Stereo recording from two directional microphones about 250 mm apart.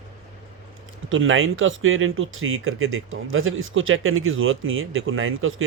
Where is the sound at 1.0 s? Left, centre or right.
Right.